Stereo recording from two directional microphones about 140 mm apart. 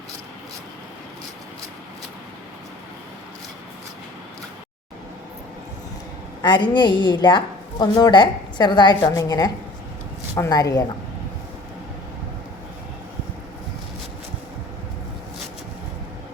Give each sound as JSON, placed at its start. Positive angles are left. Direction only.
{"t": 6.4, "sound": "a woman's voice", "side_deg": 35}